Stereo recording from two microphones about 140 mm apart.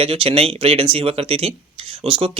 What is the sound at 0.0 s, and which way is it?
Speech, 40° right (ahead or behind).